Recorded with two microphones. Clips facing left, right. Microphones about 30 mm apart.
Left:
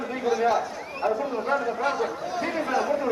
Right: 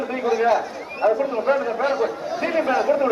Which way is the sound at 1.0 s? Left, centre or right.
Right.